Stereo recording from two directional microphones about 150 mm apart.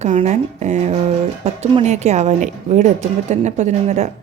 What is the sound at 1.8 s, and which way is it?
A woman's voice, 50° right (ahead or behind).